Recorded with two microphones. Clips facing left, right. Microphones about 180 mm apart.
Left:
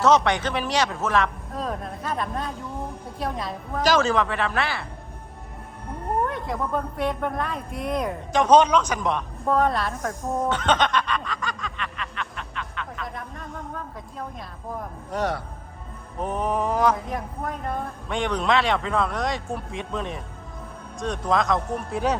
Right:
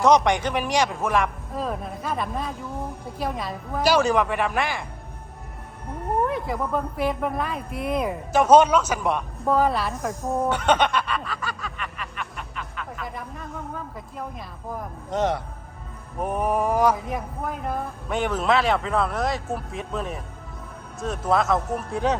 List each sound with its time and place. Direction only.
0.0 s a woman's voice: 15° right (ahead or behind)
6.2 s speech: centre (ahead or behind)
15.1 s a man's voice: 20° right (ahead or behind)
16.2 s speech: 10° right (ahead or behind)